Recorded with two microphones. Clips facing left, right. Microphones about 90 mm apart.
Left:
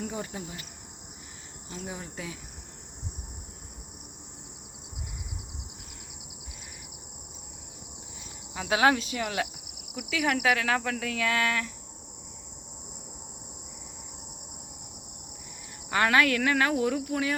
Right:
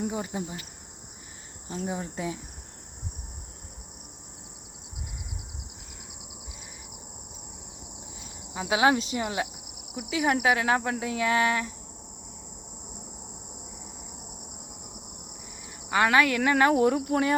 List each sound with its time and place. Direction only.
0.0 s speech: 20° right (ahead or behind)
1.6 s speech: 35° right (ahead or behind)
8.5 s speech: 20° right (ahead or behind)
15.9 s speech: 15° right (ahead or behind)
16.7 s cricket: 35° right (ahead or behind)